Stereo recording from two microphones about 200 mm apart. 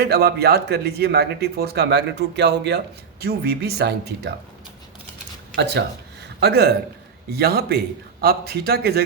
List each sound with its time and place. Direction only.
0.0 s speech: 55° right (ahead or behind)
5.5 s speech: 60° right (ahead or behind)